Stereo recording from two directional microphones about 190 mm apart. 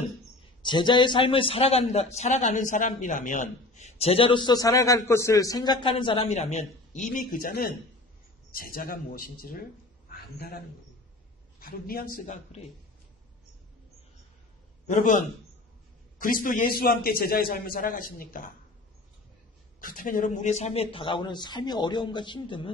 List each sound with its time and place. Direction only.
0.6 s a man's voice: 25° left (ahead or behind)
7.1 s a man's voice: 45° left (ahead or behind)
11.6 s a man's voice: 50° left (ahead or behind)
14.9 s a man's voice: 45° left (ahead or behind)
19.8 s a man's voice: 45° left (ahead or behind); by 22.7 s 25° left (ahead or behind)